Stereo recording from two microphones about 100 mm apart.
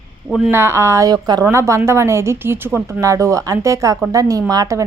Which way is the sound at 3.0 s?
30° right (ahead or behind).